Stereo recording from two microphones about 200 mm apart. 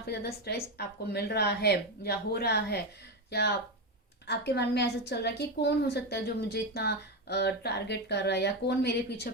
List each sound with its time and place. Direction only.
0.0 s a woman's voice: 50° left (ahead or behind)